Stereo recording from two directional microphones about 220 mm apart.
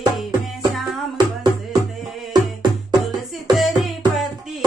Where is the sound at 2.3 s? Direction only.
20° right (ahead or behind).